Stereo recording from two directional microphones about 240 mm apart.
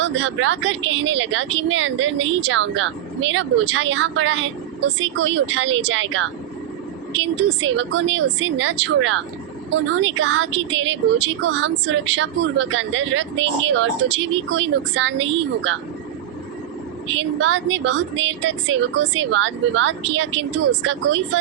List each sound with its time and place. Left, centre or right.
0.0 s speech: right
17.2 s speech: right